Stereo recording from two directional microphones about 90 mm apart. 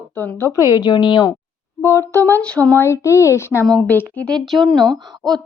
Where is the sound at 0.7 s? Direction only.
60° left (ahead or behind).